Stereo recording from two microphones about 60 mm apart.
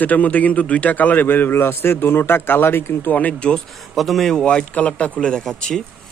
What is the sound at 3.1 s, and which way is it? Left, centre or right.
Speech, left.